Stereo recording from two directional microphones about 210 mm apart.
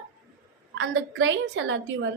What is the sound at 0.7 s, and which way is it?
A woman's voice, 60° right (ahead or behind).